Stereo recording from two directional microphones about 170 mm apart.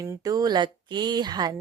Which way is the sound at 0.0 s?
20° right (ahead or behind).